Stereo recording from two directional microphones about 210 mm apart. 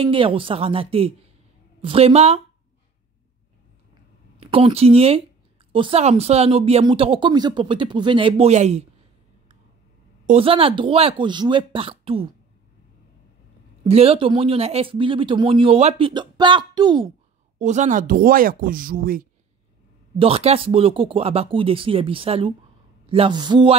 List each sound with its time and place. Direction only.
0.0 s speech: 25° right (ahead or behind)
4.4 s speech: 25° right (ahead or behind)
10.2 s speech: 30° right (ahead or behind)
13.8 s speech: 30° right (ahead or behind)
17.6 s speech: 35° right (ahead or behind)
20.2 s speech: 25° right (ahead or behind)